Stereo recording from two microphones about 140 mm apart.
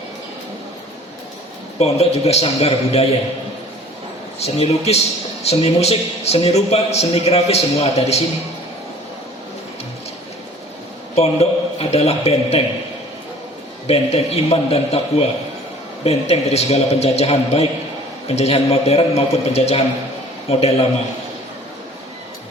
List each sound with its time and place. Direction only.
1.8 s a man's voice: 50° left (ahead or behind)
4.4 s a man's voice: 50° left (ahead or behind)
11.1 s a man's voice: 50° left (ahead or behind)
13.8 s a man's voice: 45° left (ahead or behind)